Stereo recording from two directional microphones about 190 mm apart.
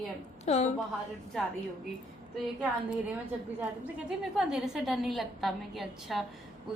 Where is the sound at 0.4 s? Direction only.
35° left (ahead or behind).